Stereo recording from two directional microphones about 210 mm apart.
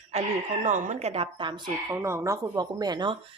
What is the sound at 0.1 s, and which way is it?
Speech, 30° right (ahead or behind).